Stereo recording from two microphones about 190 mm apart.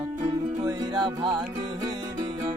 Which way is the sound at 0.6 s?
20° right (ahead or behind).